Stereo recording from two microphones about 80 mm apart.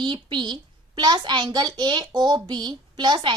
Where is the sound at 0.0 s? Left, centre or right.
Right.